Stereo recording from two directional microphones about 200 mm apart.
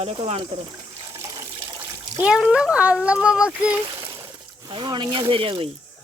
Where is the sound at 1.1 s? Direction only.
15° right (ahead or behind).